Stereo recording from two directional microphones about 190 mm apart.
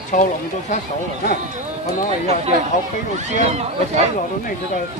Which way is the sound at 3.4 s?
35° right (ahead or behind).